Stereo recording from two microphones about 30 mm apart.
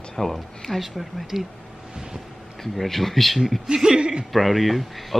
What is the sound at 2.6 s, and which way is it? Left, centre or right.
Speech, centre.